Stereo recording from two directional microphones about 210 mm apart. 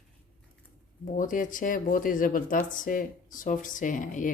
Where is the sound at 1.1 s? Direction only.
40° left (ahead or behind).